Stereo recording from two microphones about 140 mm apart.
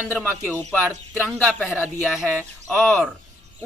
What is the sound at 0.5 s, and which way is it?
Speech, 5° left (ahead or behind).